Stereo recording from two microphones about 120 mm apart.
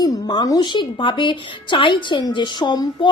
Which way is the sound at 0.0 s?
35° left (ahead or behind).